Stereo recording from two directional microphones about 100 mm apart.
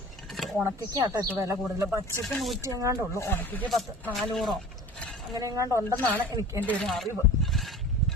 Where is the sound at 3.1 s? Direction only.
30° left (ahead or behind).